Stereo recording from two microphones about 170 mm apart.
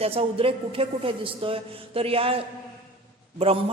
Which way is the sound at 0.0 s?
35° right (ahead or behind).